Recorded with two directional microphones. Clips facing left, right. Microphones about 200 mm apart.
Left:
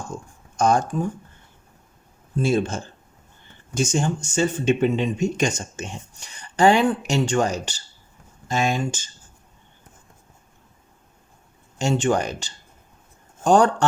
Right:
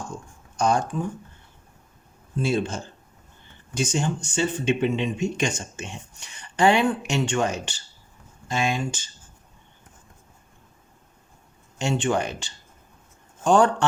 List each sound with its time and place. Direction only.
0.5 s speech: 45° left (ahead or behind)
2.4 s speech: 45° left (ahead or behind)
11.8 s speech: 40° left (ahead or behind)